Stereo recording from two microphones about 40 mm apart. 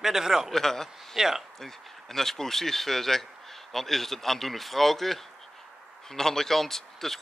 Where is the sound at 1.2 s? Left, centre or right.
Centre.